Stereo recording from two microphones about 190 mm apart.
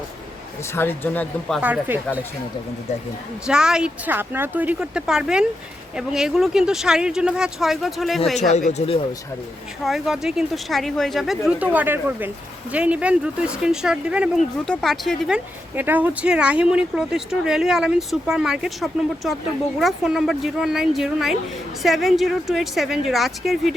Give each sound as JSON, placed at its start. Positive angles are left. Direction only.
{"t": 0.7, "sound": "speech", "side_deg": 10}
{"t": 1.6, "sound": "speech", "side_deg": -10}
{"t": 3.4, "sound": "speech", "side_deg": -5}
{"t": 8.5, "sound": "speech", "side_deg": 35}
{"t": 9.8, "sound": "speech", "side_deg": 0}
{"t": 15.7, "sound": "speech", "side_deg": -10}